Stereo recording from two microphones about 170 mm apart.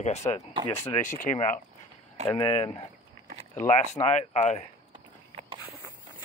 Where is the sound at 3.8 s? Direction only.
45° left (ahead or behind).